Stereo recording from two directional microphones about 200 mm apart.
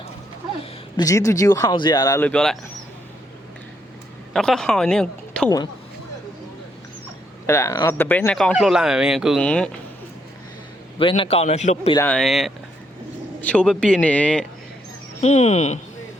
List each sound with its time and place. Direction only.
0.6 s speech: 20° left (ahead or behind); by 2.6 s 5° left (ahead or behind)
4.4 s speech: 5° left (ahead or behind)
7.4 s speech: 15° left (ahead or behind)
10.9 s a man's voice: 25° left (ahead or behind)
11.9 s speech: 5° left (ahead or behind)
15.2 s a man's voice: 35° left (ahead or behind)